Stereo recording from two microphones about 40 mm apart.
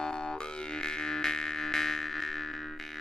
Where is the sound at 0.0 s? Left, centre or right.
Left.